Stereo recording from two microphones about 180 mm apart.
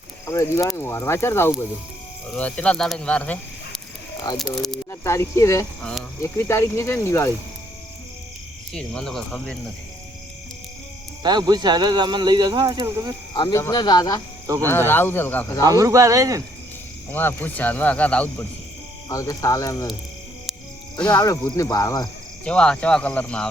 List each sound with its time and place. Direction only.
0.3 s speech: 15° left (ahead or behind)
4.9 s speech: 15° left (ahead or behind)
5.8 s speech: 5° left (ahead or behind)
8.7 s speech: 5° left (ahead or behind)
11.2 s speech: 25° right (ahead or behind)
13.3 s speech: 25° left (ahead or behind)
14.6 s speech: 10° left (ahead or behind)
15.6 s speech: 20° right (ahead or behind)
17.1 s speech: 10° left (ahead or behind)
19.0 s speech: 20° left (ahead or behind)
21.0 s speech: 10° left (ahead or behind)
22.4 s speech: 5° left (ahead or behind)